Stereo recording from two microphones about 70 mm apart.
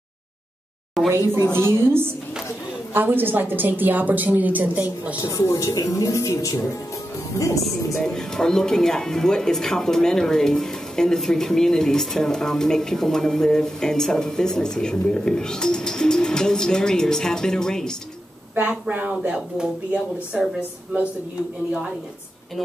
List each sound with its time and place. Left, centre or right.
1.0 s speech: centre
1.5 s a woman's voice: right
5.2 s speech: left
7.9 s speech: centre
18.5 s a woman's voice: right